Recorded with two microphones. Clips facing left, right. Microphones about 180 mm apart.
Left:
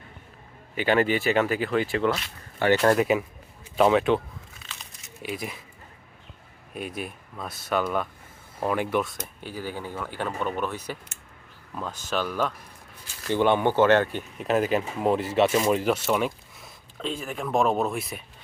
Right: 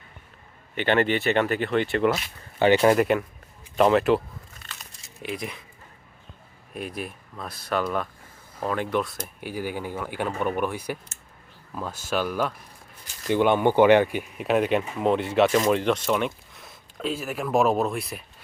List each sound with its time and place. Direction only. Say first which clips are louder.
0.8 s speech: even; 5° left (ahead or behind)
2.1 s speech: right 4 dB; 15° right (ahead or behind)
2.8 s speech: right 2 dB; centre (ahead or behind)
5.2 s speech: right 1 dB; centre (ahead or behind)
6.7 s speech: even; centre (ahead or behind)
9.1 s speech: right 3 dB; 10° right (ahead or behind)